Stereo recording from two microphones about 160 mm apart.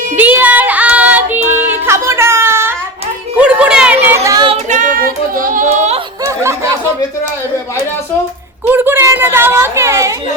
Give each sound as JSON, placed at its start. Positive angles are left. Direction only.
{"t": 0.2, "sound": "child singing", "side_deg": -10}
{"t": 1.5, "sound": "music", "side_deg": -15}
{"t": 4.0, "sound": "a sound", "side_deg": -15}
{"t": 4.4, "sound": "female singing", "side_deg": -45}
{"t": 6.2, "sound": "snicker", "side_deg": -15}
{"t": 8.6, "sound": "a woman's voice", "side_deg": -15}